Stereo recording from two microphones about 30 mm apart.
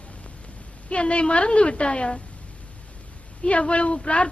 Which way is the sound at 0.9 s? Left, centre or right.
Left.